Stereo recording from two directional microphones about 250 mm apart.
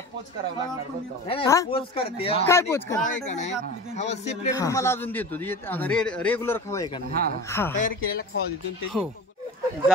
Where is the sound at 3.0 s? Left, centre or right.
Left.